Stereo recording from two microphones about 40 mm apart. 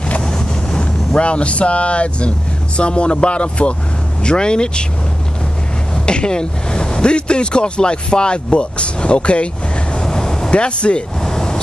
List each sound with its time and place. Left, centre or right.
0.3 s vehicle: left
2.8 s speech: left
6.0 s speech: left
9.9 s vehicle: centre
10.5 s speech: left
11.2 s vehicle: centre